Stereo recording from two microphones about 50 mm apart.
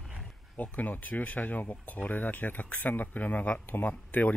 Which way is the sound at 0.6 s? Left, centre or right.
Left.